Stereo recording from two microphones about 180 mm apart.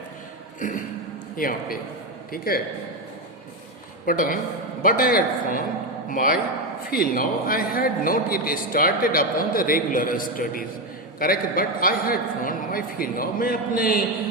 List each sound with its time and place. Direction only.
0.6 s a man's voice: 45° left (ahead or behind)
4.0 s a man's voice: 50° left (ahead or behind)